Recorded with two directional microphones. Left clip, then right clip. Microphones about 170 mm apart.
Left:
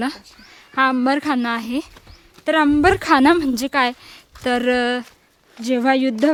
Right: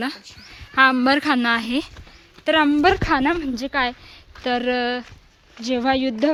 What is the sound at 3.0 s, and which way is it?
A woman's voice, 40° left (ahead or behind).